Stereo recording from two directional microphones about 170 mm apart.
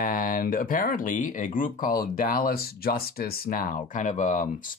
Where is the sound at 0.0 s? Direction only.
55° left (ahead or behind).